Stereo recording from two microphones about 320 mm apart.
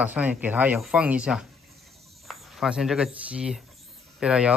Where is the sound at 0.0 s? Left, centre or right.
Centre.